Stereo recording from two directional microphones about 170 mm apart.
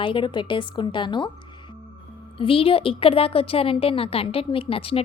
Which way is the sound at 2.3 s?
30° left (ahead or behind).